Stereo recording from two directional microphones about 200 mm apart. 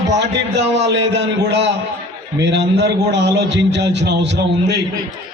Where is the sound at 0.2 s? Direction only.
60° right (ahead or behind).